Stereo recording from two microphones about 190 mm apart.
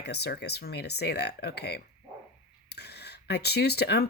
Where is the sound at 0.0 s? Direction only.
60° left (ahead or behind).